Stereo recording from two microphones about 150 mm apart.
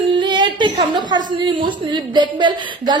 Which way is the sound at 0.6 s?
30° right (ahead or behind).